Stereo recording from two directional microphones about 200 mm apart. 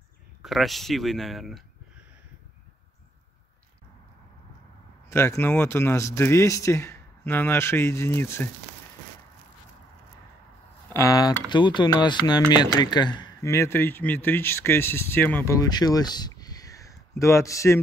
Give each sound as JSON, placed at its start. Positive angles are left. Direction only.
{"t": 0.4, "sound": "speech", "side_deg": 0}
{"t": 5.1, "sound": "speech", "side_deg": 15}
{"t": 10.9, "sound": "speech", "side_deg": 15}